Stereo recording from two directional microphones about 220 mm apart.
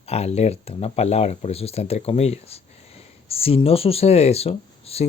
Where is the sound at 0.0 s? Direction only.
30° left (ahead or behind).